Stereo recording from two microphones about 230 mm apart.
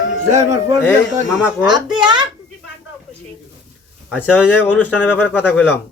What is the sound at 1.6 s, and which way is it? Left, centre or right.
Speech, centre.